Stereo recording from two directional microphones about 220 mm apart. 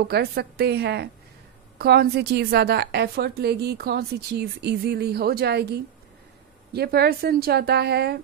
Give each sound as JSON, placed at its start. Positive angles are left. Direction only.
{"t": 0.1, "sound": "a woman's voice", "side_deg": -45}